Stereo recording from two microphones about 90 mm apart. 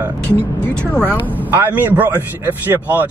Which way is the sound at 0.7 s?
20° left (ahead or behind).